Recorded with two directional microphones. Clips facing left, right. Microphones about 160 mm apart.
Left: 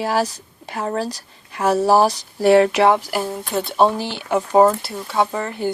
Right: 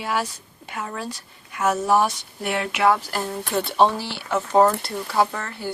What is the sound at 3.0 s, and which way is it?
Speech, 10° left (ahead or behind).